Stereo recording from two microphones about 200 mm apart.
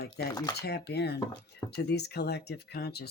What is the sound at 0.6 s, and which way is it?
Speech, 55° left (ahead or behind).